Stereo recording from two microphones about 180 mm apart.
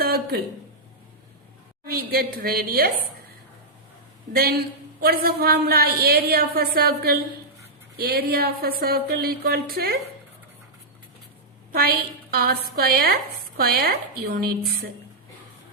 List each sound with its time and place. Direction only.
0.0 s a sound: 55° right (ahead or behind)
1.9 s a woman's voice: 55° right (ahead or behind)
4.3 s a woman's voice: 55° right (ahead or behind)
11.7 s a woman's voice: 55° right (ahead or behind)